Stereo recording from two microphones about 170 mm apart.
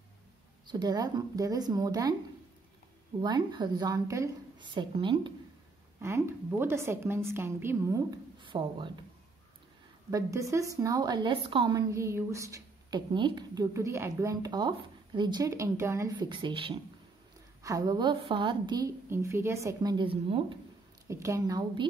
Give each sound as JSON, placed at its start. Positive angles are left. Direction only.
{"t": 0.7, "sound": "a woman's voice", "side_deg": -25}
{"t": 3.2, "sound": "a woman's voice", "side_deg": -25}
{"t": 5.9, "sound": "a woman's voice", "side_deg": -15}
{"t": 8.4, "sound": "speech", "side_deg": -30}
{"t": 10.1, "sound": "a woman's voice", "side_deg": -20}
{"t": 11.9, "sound": "a woman's voice", "side_deg": -15}
{"t": 21.1, "sound": "a woman's voice", "side_deg": -15}